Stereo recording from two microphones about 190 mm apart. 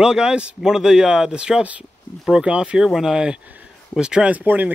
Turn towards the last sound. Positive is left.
turn(degrees=-10)  # may be behind; listen again after turning